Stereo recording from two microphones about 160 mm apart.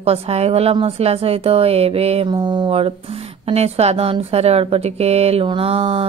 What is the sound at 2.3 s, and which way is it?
Speech, 30° right (ahead or behind).